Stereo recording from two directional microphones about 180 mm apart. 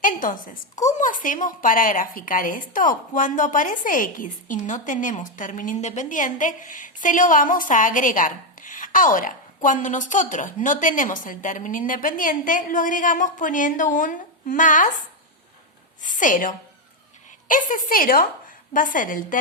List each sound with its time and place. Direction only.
0.0 s a woman's voice: 50° left (ahead or behind)
16.0 s a woman's voice: 45° left (ahead or behind)